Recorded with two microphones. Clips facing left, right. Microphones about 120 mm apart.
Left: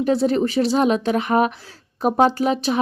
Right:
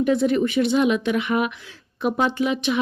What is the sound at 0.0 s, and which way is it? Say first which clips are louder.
A woman's voice: left 1 dB; 35° left (ahead or behind).